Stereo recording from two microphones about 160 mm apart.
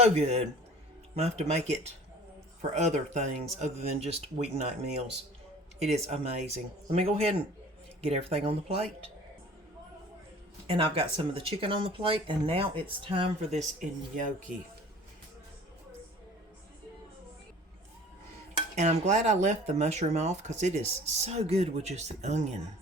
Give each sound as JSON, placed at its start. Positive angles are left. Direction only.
{"t": 0.0, "sound": "speech", "side_deg": -40}
{"t": 5.8, "sound": "speech", "side_deg": -45}
{"t": 10.7, "sound": "speech", "side_deg": -35}
{"t": 13.7, "sound": "speech", "side_deg": -55}
{"t": 18.8, "sound": "speech", "side_deg": -45}